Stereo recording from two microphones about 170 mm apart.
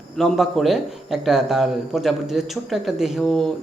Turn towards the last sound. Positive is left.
turn(degrees=5)  # may be behind; listen again after turning